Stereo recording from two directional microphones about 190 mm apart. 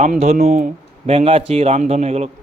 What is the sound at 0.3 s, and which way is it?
Speech, 50° right (ahead or behind).